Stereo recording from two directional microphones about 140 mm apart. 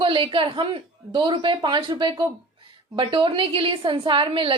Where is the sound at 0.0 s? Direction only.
40° right (ahead or behind).